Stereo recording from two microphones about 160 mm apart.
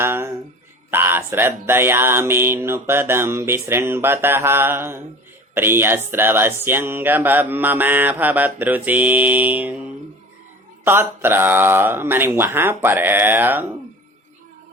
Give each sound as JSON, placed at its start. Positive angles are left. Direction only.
{"t": 0.0, "sound": "a sound", "side_deg": -15}
{"t": 0.9, "sound": "mantra", "side_deg": -15}
{"t": 10.8, "sound": "mantra", "side_deg": -15}